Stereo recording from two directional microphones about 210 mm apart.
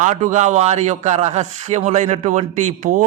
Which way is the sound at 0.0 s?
35° right (ahead or behind).